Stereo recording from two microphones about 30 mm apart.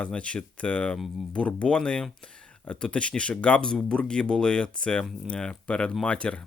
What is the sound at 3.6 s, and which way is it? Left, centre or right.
Speech, left.